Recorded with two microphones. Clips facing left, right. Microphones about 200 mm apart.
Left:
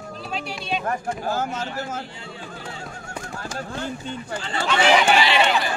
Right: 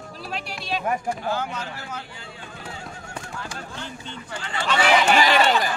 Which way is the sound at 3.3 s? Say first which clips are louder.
Left 7 dB; 45° left (ahead or behind).